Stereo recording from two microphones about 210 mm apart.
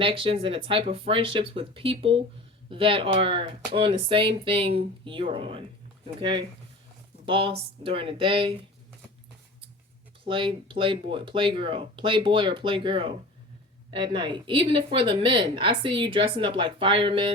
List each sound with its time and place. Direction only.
0.0 s speech: 25° right (ahead or behind)
10.2 s speech: 25° right (ahead or behind)